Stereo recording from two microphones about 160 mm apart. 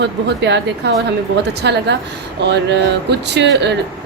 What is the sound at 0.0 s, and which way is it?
Speech, 90° right.